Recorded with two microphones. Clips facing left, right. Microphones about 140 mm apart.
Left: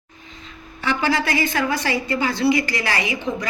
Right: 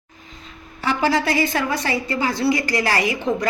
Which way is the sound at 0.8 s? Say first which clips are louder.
Right 2 dB; 35° right (ahead or behind).